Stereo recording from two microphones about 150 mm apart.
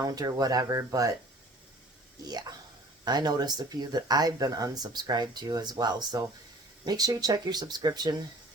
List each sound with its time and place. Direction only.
0.0 s speech: 25° right (ahead or behind)
2.2 s speech: 25° right (ahead or behind)